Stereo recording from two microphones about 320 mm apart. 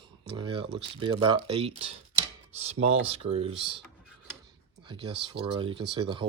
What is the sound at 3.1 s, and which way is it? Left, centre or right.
Speech, centre.